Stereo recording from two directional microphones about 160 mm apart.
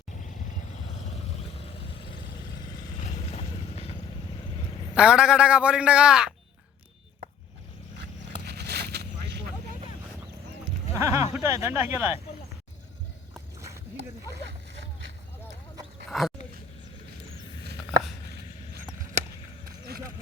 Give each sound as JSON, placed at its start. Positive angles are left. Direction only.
{"t": 3.0, "sound": "vehicle", "side_deg": 40}
{"t": 4.9, "sound": "a man's voice", "side_deg": -5}
{"t": 8.4, "sound": "vehicle", "side_deg": -90}
{"t": 10.9, "sound": "a man's voice", "side_deg": -20}
{"t": 16.0, "sound": "dog", "side_deg": 0}